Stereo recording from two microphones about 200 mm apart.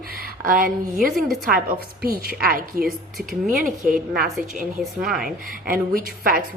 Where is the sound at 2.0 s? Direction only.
50° right (ahead or behind).